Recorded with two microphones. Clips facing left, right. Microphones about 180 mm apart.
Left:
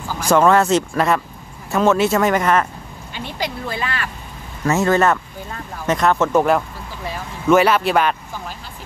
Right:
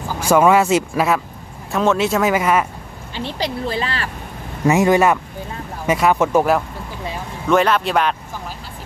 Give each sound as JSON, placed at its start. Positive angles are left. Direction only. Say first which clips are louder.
{"t": 0.1, "sound": "speech", "louder": "right 1 dB", "side_deg": -10}
{"t": 3.2, "sound": "speech", "louder": "right 3 dB", "side_deg": -30}
{"t": 4.6, "sound": "speech", "louder": "right 2 dB", "side_deg": -15}
{"t": 7.4, "sound": "speech", "louder": "left 2 dB", "side_deg": 5}